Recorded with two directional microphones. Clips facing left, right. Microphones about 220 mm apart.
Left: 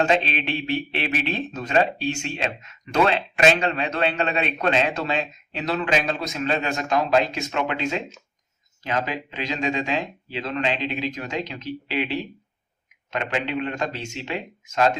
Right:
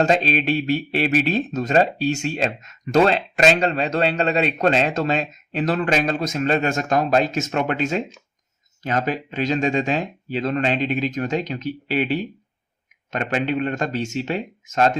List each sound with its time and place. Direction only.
0.0 s speech: 40° right (ahead or behind)
13.1 s speech: 45° right (ahead or behind)